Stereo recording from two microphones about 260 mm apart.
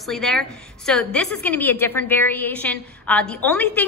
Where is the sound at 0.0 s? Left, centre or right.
Centre.